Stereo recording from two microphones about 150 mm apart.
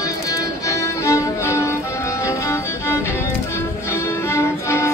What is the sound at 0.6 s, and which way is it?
Music, 20° left (ahead or behind).